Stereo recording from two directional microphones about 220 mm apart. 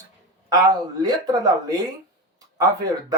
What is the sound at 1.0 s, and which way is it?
Speech, 15° right (ahead or behind).